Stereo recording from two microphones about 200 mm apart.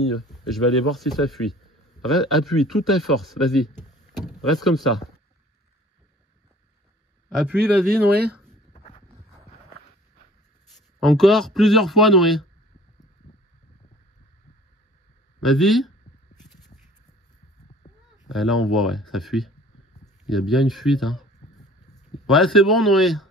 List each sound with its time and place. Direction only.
0.5 s speech: centre (ahead or behind)
7.8 s speech: 50° right (ahead or behind)
8.7 s a sound: 30° left (ahead or behind)
10.7 s speech: centre (ahead or behind)
15.4 s speech: centre (ahead or behind)
17.8 s a sound: 40° left (ahead or behind)
18.3 s speech: centre (ahead or behind)